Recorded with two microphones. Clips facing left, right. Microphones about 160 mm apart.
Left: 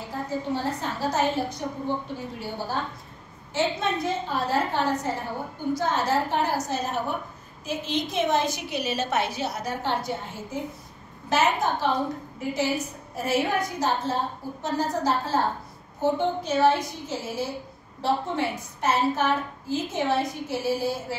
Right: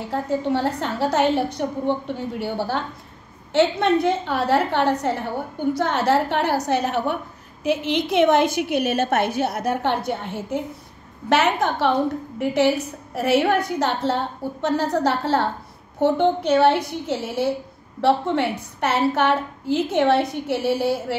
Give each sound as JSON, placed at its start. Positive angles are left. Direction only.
{"t": 0.1, "sound": "a woman's voice", "side_deg": -70}